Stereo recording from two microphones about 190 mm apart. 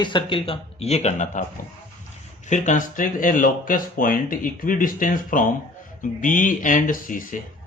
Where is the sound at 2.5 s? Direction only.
40° left (ahead or behind).